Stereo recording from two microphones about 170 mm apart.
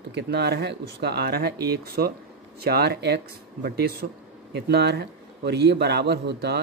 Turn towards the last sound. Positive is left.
turn(degrees=-75)  # may be behind; listen again after turning